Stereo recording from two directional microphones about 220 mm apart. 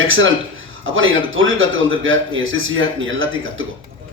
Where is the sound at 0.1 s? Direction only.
60° right (ahead or behind).